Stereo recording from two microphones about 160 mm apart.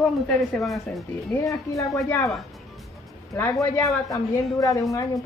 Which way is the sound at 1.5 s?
20° left (ahead or behind).